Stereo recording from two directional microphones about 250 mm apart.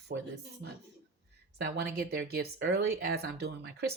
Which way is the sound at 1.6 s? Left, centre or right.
Right.